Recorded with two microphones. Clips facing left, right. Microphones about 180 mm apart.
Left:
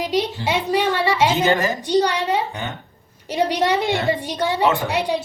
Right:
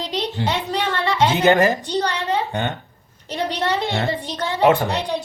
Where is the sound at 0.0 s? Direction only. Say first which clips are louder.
Left 5 dB; 20° right (ahead or behind).